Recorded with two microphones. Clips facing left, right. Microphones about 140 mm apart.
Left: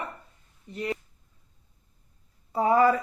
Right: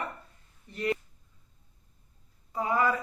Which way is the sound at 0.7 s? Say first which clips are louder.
Right 1 dB; 20° left (ahead or behind).